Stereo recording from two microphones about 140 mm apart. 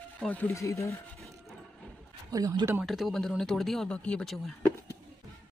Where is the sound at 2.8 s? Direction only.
Centre (ahead or behind).